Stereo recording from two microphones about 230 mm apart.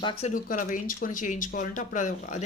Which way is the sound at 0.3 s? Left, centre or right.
Left.